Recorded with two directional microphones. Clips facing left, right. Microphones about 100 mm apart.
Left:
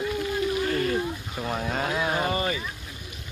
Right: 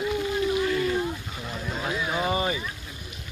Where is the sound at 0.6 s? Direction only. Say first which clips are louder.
Right 1 dB; 45° left (ahead or behind).